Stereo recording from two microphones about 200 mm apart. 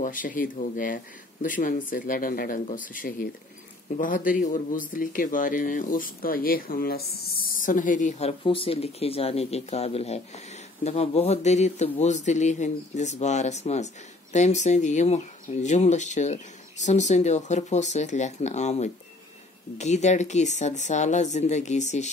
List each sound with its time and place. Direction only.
0.0 s speech: 40° left (ahead or behind)